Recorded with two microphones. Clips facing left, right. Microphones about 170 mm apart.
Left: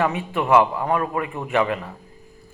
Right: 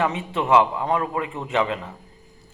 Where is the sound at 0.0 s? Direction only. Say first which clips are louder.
Left 1 dB; 25° right (ahead or behind).